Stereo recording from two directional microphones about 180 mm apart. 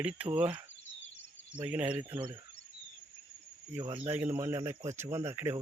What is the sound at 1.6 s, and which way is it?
Speech, 5° right (ahead or behind).